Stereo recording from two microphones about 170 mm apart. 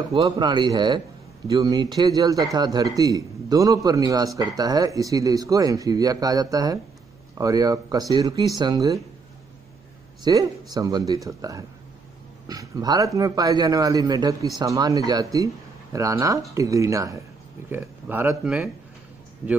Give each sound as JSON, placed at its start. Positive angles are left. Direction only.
{"t": 0.2, "sound": "speech", "side_deg": -25}
{"t": 10.2, "sound": "speech", "side_deg": -20}